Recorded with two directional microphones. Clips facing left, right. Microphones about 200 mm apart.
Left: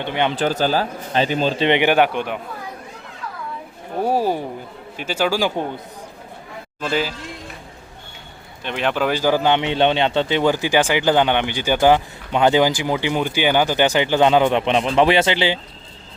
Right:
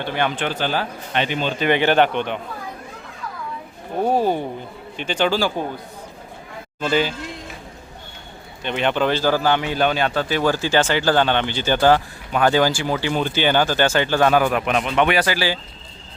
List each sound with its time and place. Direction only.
0.0 s speech: 20° left (ahead or behind)
0.3 s speech: 40° left (ahead or behind)
1.6 s a man's voice: 20° left (ahead or behind)
4.0 s a man's voice: 5° left (ahead or behind)
6.7 s speech: centre (ahead or behind)
8.6 s a man's voice: centre (ahead or behind); by 15.5 s 20° left (ahead or behind)